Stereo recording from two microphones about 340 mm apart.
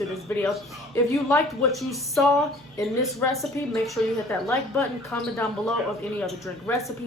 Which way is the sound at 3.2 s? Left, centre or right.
Centre.